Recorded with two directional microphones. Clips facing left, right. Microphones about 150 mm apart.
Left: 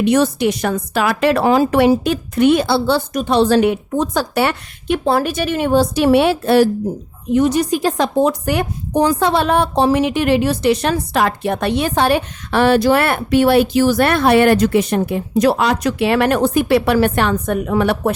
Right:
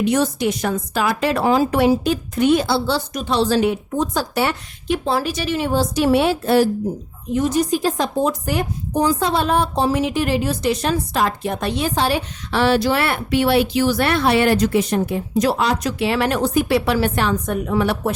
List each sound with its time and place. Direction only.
0.0 s a woman's voice: 70° left (ahead or behind)